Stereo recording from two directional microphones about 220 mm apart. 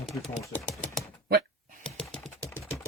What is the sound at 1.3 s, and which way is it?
Computer keyboard, 45° right (ahead or behind).